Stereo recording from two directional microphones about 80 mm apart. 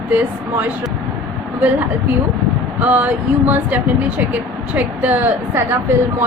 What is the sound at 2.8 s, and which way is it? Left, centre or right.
Speech, centre.